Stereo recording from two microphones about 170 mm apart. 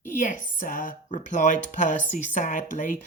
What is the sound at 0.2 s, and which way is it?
Speech, 50° left (ahead or behind).